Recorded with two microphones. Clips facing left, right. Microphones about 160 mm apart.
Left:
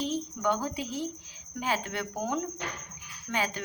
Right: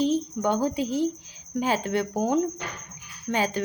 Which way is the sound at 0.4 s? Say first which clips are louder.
Right 4 dB; 35° right (ahead or behind).